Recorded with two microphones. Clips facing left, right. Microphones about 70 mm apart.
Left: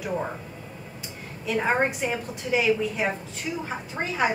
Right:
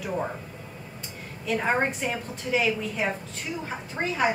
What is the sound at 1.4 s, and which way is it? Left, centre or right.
A woman's voice, centre.